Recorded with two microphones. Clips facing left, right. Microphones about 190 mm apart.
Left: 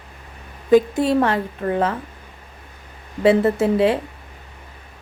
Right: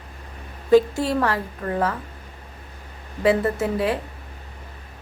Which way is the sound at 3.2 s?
25° left (ahead or behind).